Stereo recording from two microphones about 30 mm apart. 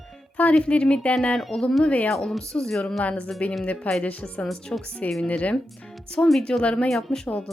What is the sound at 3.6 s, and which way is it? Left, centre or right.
A woman's voice, left.